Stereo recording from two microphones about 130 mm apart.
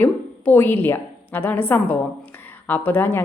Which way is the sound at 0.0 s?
15° left (ahead or behind).